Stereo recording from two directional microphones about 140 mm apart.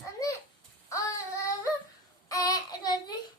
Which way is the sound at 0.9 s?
20° left (ahead or behind).